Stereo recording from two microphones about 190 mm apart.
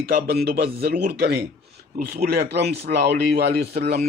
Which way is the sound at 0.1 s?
55° right (ahead or behind).